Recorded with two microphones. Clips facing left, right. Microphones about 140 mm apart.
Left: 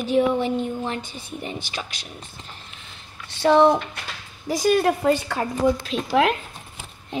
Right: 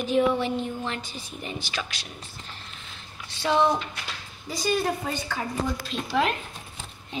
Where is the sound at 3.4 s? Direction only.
35° left (ahead or behind).